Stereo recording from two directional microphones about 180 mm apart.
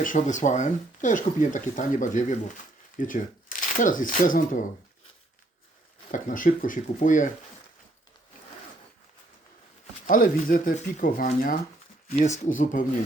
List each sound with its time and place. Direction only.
0.0 s speech: 45° left (ahead or behind)
6.1 s speech: 45° left (ahead or behind)
10.1 s speech: 50° left (ahead or behind)